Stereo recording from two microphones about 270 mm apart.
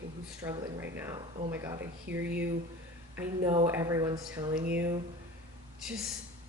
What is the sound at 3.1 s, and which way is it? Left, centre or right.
Speech, centre.